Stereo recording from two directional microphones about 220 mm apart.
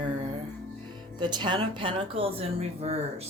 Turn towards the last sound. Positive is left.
turn(degrees=-30)  # may be behind; listen again after turning